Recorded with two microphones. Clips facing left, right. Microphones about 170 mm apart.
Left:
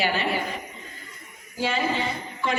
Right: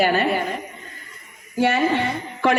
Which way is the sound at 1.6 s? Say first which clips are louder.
Right 6 dB; 65° right (ahead or behind).